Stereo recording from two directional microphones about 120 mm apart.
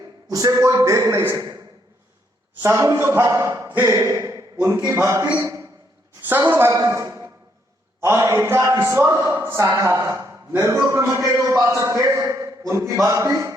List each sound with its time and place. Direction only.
0.3 s a man's voice: 30° right (ahead or behind)
2.6 s a man's voice: 25° right (ahead or behind)
6.7 s a man's voice: 30° right (ahead or behind)